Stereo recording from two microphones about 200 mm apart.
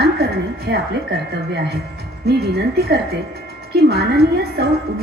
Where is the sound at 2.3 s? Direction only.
55° right (ahead or behind).